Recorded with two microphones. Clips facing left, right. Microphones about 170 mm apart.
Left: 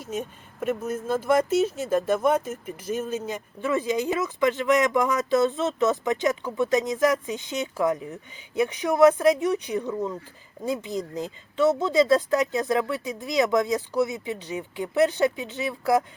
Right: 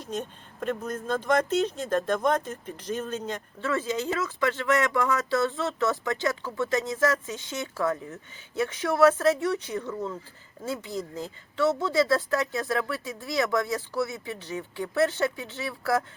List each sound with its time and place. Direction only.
0.0 s speech: 10° left (ahead or behind)